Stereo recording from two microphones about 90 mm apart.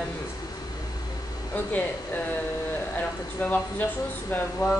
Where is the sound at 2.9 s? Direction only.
20° left (ahead or behind).